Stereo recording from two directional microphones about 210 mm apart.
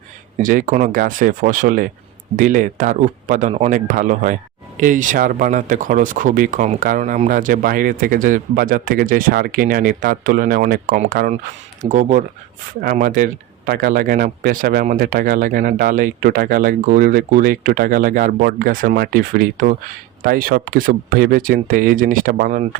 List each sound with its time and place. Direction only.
0.3 s speech: 40° right (ahead or behind)